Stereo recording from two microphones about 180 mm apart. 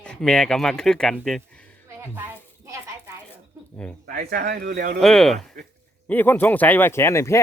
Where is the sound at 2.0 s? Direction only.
15° right (ahead or behind).